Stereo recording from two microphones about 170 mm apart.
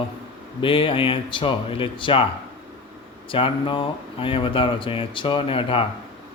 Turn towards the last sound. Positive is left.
turn(degrees=30)  # may be behind; listen again after turning